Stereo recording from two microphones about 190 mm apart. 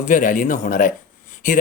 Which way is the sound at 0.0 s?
45° left (ahead or behind).